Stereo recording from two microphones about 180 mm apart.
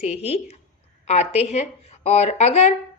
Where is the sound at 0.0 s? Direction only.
35° left (ahead or behind).